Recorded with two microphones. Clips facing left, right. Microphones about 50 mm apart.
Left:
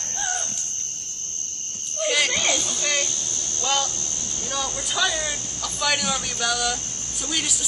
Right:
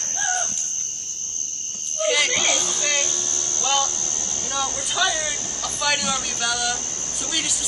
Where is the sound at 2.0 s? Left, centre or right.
Centre.